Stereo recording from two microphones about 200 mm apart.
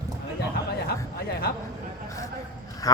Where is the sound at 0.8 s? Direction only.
50° left (ahead or behind).